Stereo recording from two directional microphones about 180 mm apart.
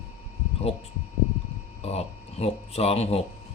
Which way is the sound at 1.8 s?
35° left (ahead or behind).